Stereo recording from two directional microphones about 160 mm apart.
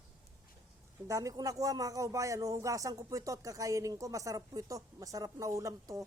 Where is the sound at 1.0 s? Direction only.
20° right (ahead or behind).